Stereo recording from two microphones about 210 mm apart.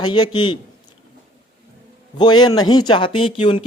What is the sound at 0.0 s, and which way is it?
Speech, 20° left (ahead or behind).